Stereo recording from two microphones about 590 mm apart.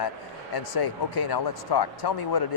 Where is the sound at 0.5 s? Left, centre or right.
Left.